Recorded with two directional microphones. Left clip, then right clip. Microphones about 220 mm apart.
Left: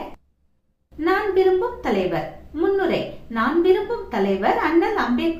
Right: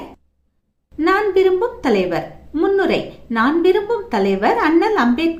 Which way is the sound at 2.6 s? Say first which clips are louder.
Right 4 dB; 50° right (ahead or behind).